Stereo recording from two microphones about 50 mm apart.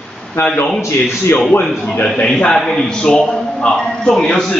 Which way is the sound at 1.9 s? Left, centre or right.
Centre.